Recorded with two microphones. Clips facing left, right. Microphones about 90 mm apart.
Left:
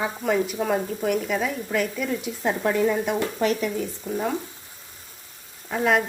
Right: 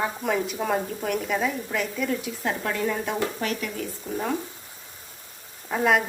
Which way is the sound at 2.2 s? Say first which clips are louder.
Left 4 dB; 20° left (ahead or behind).